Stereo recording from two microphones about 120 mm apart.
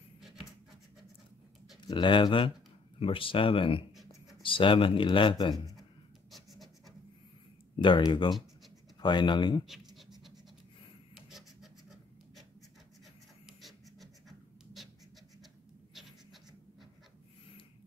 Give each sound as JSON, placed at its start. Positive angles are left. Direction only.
{"t": 1.8, "sound": "speech", "side_deg": 40}
{"t": 6.3, "sound": "scratch", "side_deg": 0}
{"t": 7.8, "sound": "speech", "side_deg": 40}
{"t": 9.9, "sound": "scratch", "side_deg": 0}
{"t": 13.5, "sound": "scratch", "side_deg": 0}